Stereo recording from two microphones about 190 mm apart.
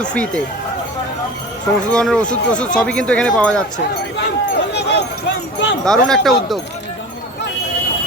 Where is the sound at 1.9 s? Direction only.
5° left (ahead or behind).